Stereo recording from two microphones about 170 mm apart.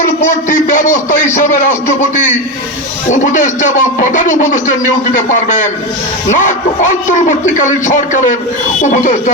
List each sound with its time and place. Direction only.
0.0 s a man's voice: 50° left (ahead or behind)